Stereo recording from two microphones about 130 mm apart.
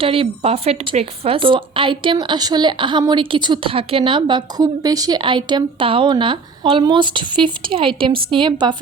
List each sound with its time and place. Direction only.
0.0 s a woman's voice: 45° right (ahead or behind)